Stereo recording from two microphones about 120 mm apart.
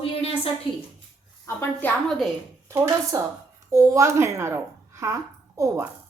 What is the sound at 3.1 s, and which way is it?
A child's voice, 30° right (ahead or behind).